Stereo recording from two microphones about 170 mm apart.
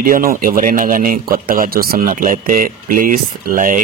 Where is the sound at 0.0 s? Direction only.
55° right (ahead or behind).